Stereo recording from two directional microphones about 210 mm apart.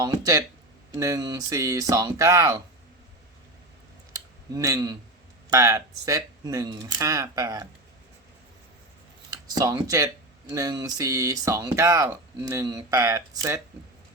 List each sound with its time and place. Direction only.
0.0 s speech: 15° right (ahead or behind)
4.5 s speech: 15° right (ahead or behind)
9.6 s speech: 15° right (ahead or behind)